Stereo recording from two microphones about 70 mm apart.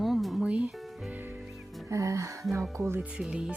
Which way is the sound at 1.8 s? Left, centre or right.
Right.